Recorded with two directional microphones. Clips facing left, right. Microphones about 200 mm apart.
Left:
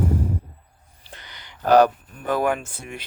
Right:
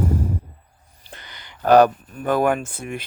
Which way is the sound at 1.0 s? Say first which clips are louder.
Right 2 dB; 55° right (ahead or behind).